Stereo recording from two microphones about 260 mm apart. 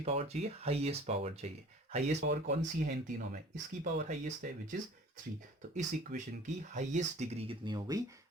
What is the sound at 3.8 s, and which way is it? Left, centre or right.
Speech, right.